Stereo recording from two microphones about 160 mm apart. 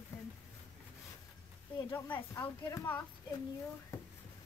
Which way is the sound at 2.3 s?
15° left (ahead or behind).